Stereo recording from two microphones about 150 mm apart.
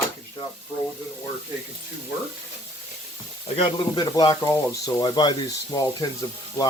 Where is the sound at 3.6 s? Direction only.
35° left (ahead or behind).